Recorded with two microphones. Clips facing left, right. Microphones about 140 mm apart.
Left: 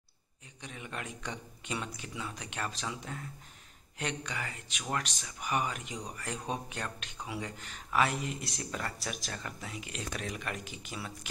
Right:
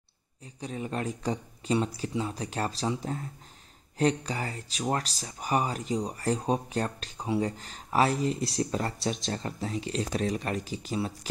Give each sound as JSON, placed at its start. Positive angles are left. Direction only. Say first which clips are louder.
{"t": 0.6, "sound": "speech", "louder": "right 9 dB", "side_deg": -35}